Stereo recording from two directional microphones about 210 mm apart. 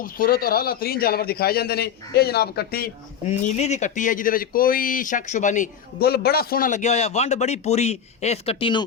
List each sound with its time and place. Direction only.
0.0 s speech: 45° left (ahead or behind); by 8.8 s 25° left (ahead or behind)